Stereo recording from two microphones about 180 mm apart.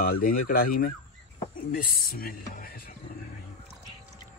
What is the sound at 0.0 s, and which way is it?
Speech, 55° left (ahead or behind).